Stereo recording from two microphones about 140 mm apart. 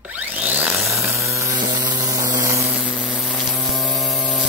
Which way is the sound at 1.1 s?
20° right (ahead or behind).